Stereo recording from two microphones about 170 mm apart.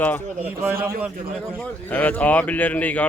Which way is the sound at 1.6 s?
10° left (ahead or behind).